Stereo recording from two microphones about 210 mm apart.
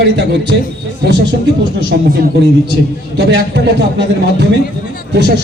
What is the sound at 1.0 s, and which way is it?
Speech, 55° right (ahead or behind).